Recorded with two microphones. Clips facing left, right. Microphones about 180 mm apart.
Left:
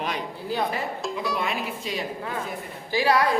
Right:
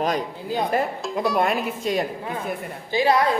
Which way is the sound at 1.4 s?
50° right (ahead or behind).